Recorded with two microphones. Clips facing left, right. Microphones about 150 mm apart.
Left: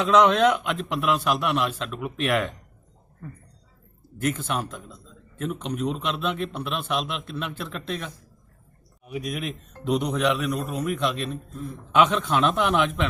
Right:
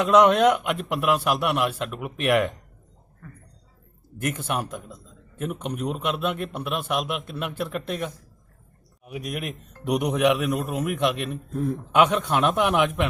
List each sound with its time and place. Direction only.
0.0 s a man's voice: 10° right (ahead or behind)
4.2 s a man's voice: 10° right (ahead or behind)
11.5 s a man's voice: 70° right (ahead or behind)
11.9 s a man's voice: 10° right (ahead or behind)